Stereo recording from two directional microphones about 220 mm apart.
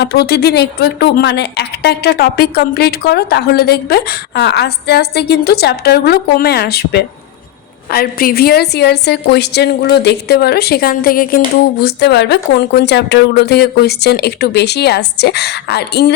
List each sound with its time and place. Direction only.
0.0 s a woman's voice: 45° left (ahead or behind)